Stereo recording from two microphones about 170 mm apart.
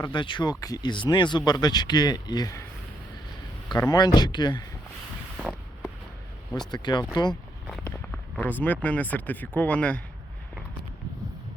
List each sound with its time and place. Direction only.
0.0 s speech: 30° left (ahead or behind)
3.7 s speech: 25° left (ahead or behind)
5.4 s vehicle: 5° right (ahead or behind)
6.7 s speech: 25° left (ahead or behind)
7.9 s speech: 10° left (ahead or behind)